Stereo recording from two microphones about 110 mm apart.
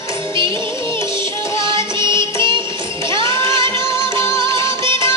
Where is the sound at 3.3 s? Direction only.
45° right (ahead or behind).